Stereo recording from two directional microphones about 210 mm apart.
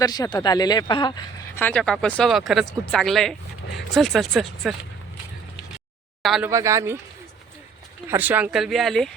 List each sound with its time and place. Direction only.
0.0 s speech: 20° left (ahead or behind)
1.5 s speech: 5° left (ahead or behind)
6.2 s speech: centre (ahead or behind)
6.5 s speech: 15° right (ahead or behind)
8.0 s speech: 10° right (ahead or behind)